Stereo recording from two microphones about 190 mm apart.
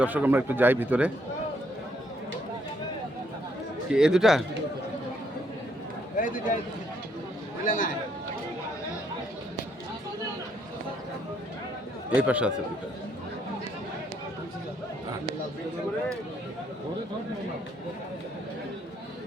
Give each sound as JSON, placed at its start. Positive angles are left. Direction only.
{"t": 0.0, "sound": "a man's voice", "side_deg": -10}
{"t": 3.9, "sound": "speech", "side_deg": -5}
{"t": 6.1, "sound": "speech", "side_deg": 45}
{"t": 7.6, "sound": "speech", "side_deg": 45}
{"t": 12.1, "sound": "a man's voice", "side_deg": -5}